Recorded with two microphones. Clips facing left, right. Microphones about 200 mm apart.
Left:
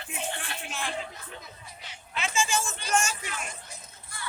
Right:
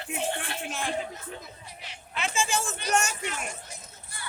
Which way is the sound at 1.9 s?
60° right (ahead or behind).